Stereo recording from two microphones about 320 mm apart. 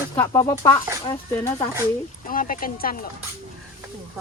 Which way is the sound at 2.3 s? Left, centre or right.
Left.